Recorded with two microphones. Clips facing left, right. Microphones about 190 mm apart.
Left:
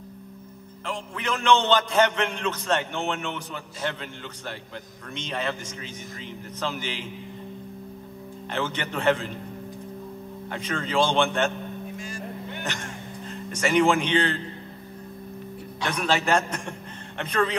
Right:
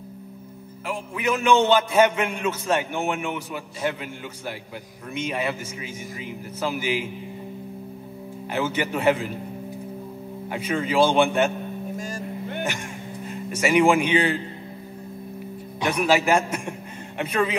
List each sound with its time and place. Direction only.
0.8 s a man's voice: 10° right (ahead or behind)
8.5 s a man's voice: 10° right (ahead or behind)
10.5 s a man's voice: 10° right (ahead or behind)
12.0 s vehicle: 50° right (ahead or behind)
12.6 s speech: 10° right (ahead or behind)
15.8 s a man's voice: 10° right (ahead or behind)